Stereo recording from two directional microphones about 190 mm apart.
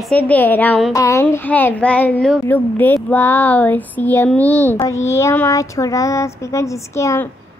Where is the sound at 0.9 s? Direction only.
15° left (ahead or behind).